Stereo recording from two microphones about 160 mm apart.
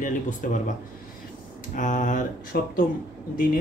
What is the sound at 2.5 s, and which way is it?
Speech, 70° left (ahead or behind).